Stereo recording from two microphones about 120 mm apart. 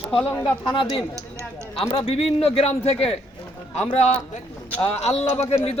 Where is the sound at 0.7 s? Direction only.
45° left (ahead or behind).